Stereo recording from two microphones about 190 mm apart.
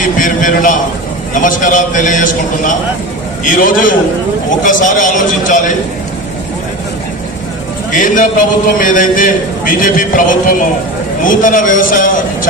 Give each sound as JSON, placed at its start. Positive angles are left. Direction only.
{"t": 0.0, "sound": "a sound", "side_deg": 45}
{"t": 1.3, "sound": "a man's voice", "side_deg": 45}
{"t": 7.9, "sound": "a man's voice", "side_deg": 45}